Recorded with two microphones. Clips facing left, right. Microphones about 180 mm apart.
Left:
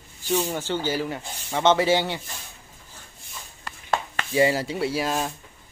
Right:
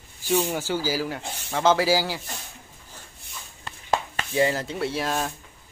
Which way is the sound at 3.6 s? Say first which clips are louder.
Right 1 dB; 20° right (ahead or behind).